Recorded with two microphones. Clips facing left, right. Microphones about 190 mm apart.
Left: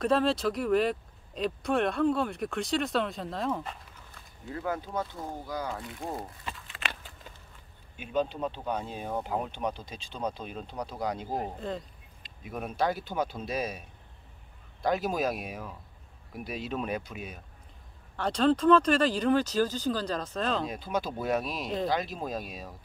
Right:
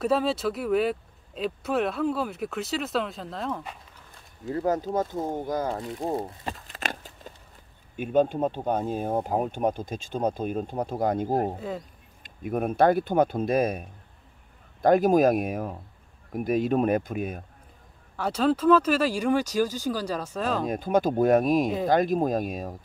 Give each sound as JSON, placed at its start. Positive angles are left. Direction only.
{"t": 0.0, "sound": "speech", "side_deg": -5}
{"t": 4.5, "sound": "speech", "side_deg": -40}
{"t": 6.4, "sound": "a sound", "side_deg": -40}
{"t": 7.9, "sound": "speech", "side_deg": -50}
{"t": 11.5, "sound": "speech", "side_deg": -5}
{"t": 12.2, "sound": "speech", "side_deg": -50}
{"t": 18.1, "sound": "speech", "side_deg": -5}
{"t": 20.6, "sound": "speech", "side_deg": -50}